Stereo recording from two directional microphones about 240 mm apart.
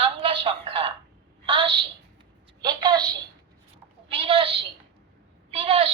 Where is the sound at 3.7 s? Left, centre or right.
Right.